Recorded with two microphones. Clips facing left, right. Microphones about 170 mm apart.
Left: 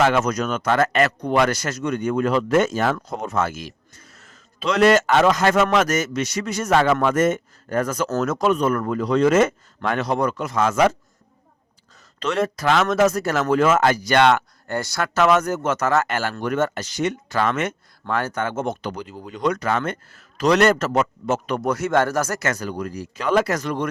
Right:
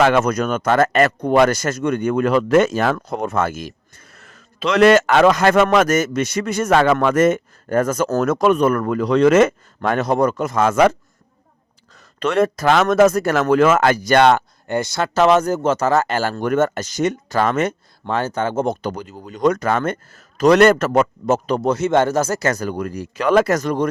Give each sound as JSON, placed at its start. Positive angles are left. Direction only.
{"t": 0.0, "sound": "speech", "side_deg": -55}
{"t": 8.2, "sound": "speech", "side_deg": -60}
{"t": 9.8, "sound": "a man's voice", "side_deg": -45}
{"t": 11.9, "sound": "a man's voice", "side_deg": -55}
{"t": 14.7, "sound": "speech", "side_deg": -20}
{"t": 16.4, "sound": "a man's voice", "side_deg": -45}
{"t": 18.0, "sound": "a man's voice", "side_deg": -25}